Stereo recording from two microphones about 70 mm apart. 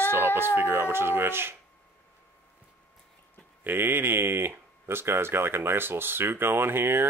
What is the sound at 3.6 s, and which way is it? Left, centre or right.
Speech, right.